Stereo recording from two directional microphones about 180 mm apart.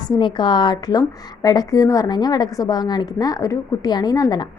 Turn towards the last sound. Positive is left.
turn(degrees=20)  # may be behind; listen again after turning